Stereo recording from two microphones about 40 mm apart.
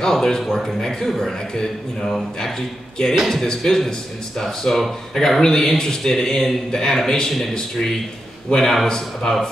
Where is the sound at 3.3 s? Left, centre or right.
Centre.